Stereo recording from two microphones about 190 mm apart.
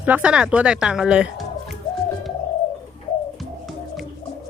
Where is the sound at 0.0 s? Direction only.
5° right (ahead or behind).